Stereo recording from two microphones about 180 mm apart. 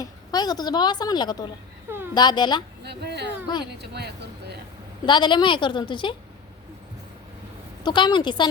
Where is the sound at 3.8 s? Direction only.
65° right (ahead or behind).